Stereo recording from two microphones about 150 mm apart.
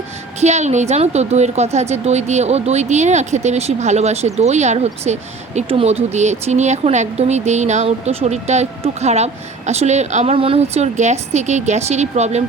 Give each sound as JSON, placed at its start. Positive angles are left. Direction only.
{"t": 0.3, "sound": "speech", "side_deg": -50}
{"t": 10.3, "sound": "speech", "side_deg": -40}